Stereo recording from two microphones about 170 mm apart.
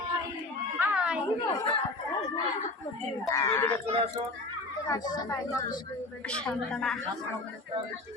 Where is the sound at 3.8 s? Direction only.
35° right (ahead or behind).